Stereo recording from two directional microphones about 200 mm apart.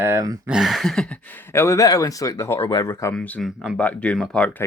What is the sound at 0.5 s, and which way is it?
Speech, centre (ahead or behind).